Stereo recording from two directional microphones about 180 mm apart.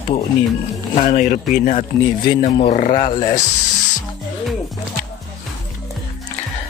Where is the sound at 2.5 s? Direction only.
30° left (ahead or behind).